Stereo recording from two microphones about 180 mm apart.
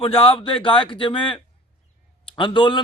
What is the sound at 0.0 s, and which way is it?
A man's voice, 30° left (ahead or behind).